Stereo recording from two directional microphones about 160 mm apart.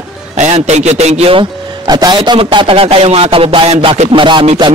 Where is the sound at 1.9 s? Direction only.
25° right (ahead or behind).